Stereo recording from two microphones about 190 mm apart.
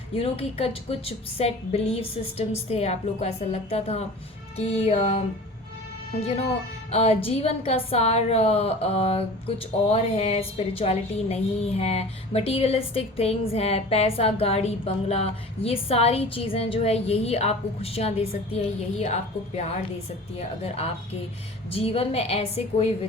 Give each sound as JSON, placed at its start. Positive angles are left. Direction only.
{"t": 0.1, "sound": "a woman's voice", "side_deg": 30}
{"t": 6.9, "sound": "a woman's voice", "side_deg": 30}
{"t": 21.7, "sound": "a woman's voice", "side_deg": 30}